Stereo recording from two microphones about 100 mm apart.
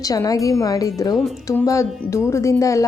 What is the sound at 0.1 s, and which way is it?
Speech, 35° left (ahead or behind).